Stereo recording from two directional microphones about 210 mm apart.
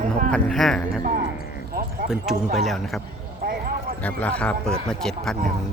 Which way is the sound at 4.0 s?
5° left (ahead or behind).